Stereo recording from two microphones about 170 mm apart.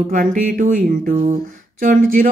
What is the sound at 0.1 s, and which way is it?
Speech, 50° right (ahead or behind).